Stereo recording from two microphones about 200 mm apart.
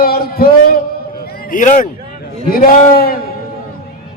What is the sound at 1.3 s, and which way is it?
Speech, 40° left (ahead or behind).